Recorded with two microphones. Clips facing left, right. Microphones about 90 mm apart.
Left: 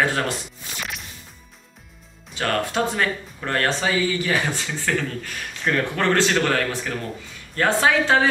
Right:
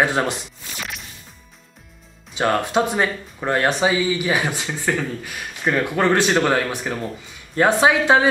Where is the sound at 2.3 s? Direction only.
20° right (ahead or behind).